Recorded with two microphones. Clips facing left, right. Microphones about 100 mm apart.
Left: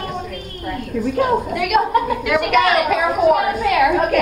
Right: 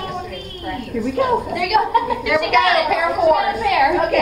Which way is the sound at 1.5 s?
40° left (ahead or behind).